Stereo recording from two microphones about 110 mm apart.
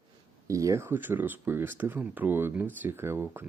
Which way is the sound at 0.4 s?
30° right (ahead or behind).